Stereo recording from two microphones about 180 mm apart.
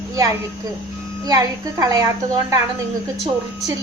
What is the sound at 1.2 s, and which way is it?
A woman's voice, 20° right (ahead or behind).